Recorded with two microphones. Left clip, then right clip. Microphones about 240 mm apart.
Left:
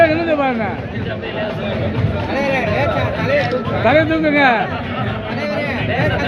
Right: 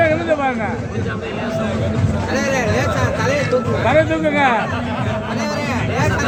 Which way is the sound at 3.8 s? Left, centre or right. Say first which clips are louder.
Left 3 dB; left.